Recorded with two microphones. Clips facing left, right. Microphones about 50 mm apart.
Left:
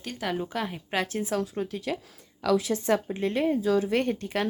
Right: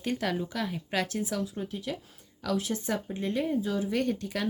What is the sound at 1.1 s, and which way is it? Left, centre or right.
Speech, left.